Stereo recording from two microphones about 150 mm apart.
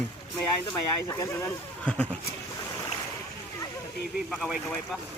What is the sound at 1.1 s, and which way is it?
Speech, 20° left (ahead or behind).